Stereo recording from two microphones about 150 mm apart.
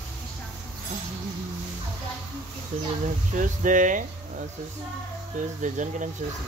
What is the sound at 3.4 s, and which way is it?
Speech, 60° right (ahead or behind).